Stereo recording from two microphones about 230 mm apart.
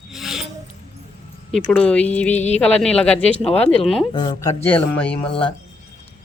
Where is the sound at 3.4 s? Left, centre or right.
Left; by 5.1 s centre.